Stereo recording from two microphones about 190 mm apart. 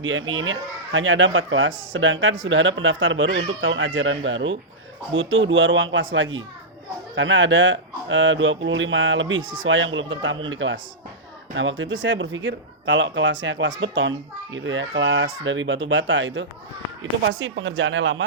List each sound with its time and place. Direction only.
0.0 s speech: 90° right